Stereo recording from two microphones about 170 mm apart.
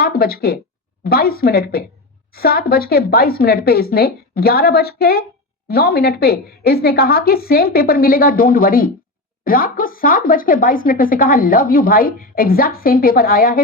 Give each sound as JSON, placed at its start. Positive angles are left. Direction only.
{"t": 0.0, "sound": "speech", "side_deg": 60}